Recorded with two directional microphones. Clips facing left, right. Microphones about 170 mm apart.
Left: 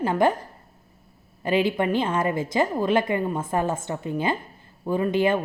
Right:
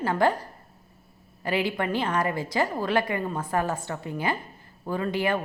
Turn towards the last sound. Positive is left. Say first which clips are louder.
# left 5 dB
turn(degrees=20)  # may be behind; listen again after turning